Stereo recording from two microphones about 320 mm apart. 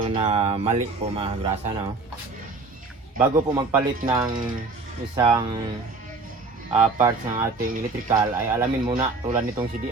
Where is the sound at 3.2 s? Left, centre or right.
Centre.